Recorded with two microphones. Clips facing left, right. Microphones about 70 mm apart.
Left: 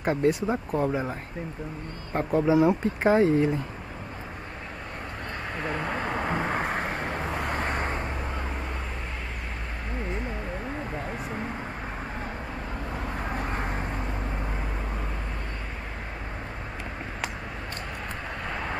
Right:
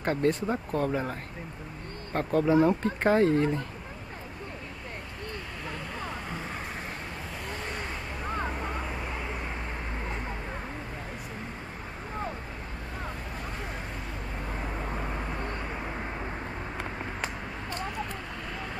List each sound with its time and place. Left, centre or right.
0.0 s speech: centre
2.1 s speech: centre
5.6 s vehicle: left
13.3 s vehicle: left
18.5 s vehicle: left